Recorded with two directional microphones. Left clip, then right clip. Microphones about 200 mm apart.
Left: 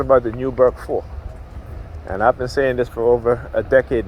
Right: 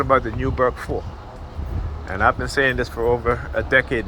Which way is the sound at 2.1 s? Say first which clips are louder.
Left 2 dB; 40° left (ahead or behind).